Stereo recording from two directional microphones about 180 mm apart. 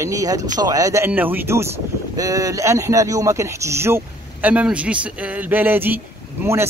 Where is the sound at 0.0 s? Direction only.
20° right (ahead or behind).